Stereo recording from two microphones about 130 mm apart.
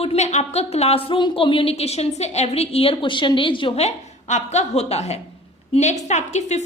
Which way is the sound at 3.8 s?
65° left (ahead or behind).